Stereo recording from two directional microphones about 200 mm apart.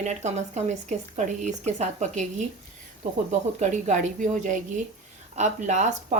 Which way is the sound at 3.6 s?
35° right (ahead or behind).